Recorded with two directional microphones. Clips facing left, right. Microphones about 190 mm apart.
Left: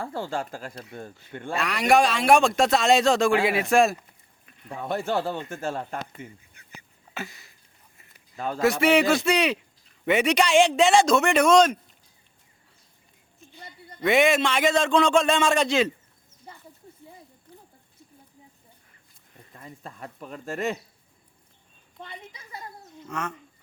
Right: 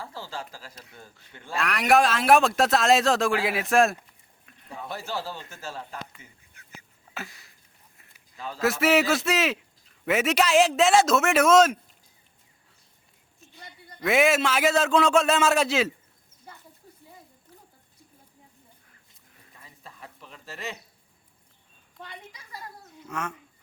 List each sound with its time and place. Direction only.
0.0 s speech: 55° left (ahead or behind)
1.5 s a man's voice: centre (ahead or behind)
4.7 s speech: 55° left (ahead or behind)
6.5 s a sound: centre (ahead or behind)
8.4 s speech: 50° left (ahead or behind)
8.6 s a man's voice: centre (ahead or behind)
13.4 s a sound: centre (ahead or behind)
14.0 s a man's voice: centre (ahead or behind)
17.5 s a sound: 5° right (ahead or behind)
19.5 s speech: 50° left (ahead or behind)
21.9 s a woman's voice: 20° left (ahead or behind)
23.0 s speech: 10° right (ahead or behind)